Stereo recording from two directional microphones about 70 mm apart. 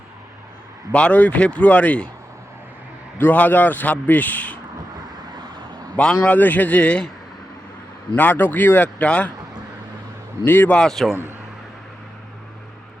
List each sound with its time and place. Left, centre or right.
0.9 s a man's voice: centre
3.2 s a man's voice: left
6.2 s a man's voice: left
8.1 s a man's voice: left
10.4 s a man's voice: left
10.7 s speech: centre